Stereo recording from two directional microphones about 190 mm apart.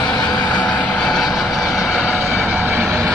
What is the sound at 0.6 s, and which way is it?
Vehicle, 5° left (ahead or behind).